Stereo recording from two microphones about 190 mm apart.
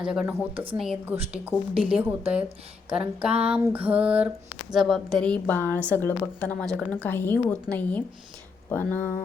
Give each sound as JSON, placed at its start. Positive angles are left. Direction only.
{"t": 0.0, "sound": "a woman's voice", "side_deg": -5}
{"t": 0.5, "sound": "a woman's voice", "side_deg": -25}
{"t": 0.8, "sound": "a woman's voice", "side_deg": -5}